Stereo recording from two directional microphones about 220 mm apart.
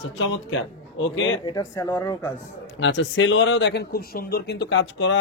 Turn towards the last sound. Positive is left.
turn(degrees=55)  # may be behind; listen again after turning